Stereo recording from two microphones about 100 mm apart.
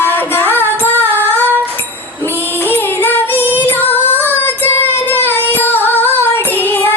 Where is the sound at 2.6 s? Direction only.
20° left (ahead or behind).